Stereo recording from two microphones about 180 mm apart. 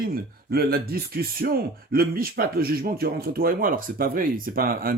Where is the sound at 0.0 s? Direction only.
55° right (ahead or behind).